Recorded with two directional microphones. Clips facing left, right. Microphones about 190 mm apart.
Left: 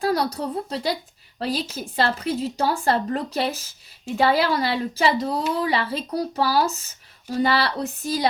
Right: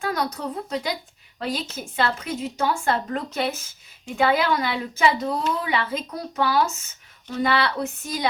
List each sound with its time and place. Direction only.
0.0 s a woman's voice: 35° left (ahead or behind)